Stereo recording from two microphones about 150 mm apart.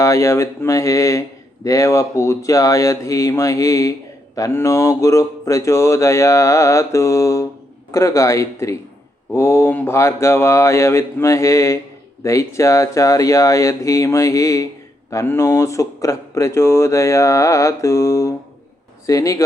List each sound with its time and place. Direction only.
0.0 s speech: 20° left (ahead or behind)